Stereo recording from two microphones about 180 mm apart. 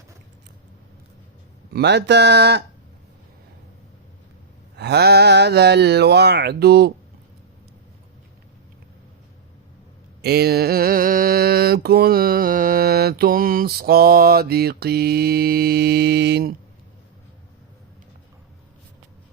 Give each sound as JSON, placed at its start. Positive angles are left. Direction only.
{"t": 1.7, "sound": "speech", "side_deg": -70}
{"t": 4.8, "sound": "mantra", "side_deg": -65}
{"t": 10.2, "sound": "mantra", "side_deg": -60}